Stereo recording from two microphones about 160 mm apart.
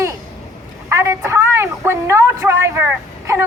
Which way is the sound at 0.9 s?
20° right (ahead or behind).